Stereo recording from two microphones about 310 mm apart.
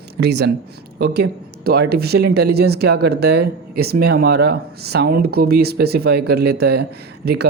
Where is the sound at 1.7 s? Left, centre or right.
Right.